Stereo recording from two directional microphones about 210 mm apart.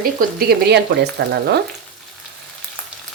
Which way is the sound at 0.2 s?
45° right (ahead or behind).